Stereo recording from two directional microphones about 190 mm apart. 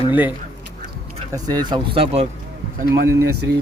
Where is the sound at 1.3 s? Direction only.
20° right (ahead or behind).